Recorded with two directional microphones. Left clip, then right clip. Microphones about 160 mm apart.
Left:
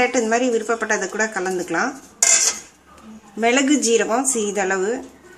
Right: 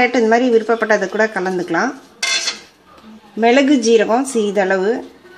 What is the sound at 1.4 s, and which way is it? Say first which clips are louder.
Speech: right 4 dB; 40° right (ahead or behind).